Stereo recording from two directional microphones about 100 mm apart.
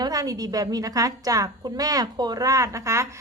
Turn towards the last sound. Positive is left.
turn(degrees=-30)  # may be behind; listen again after turning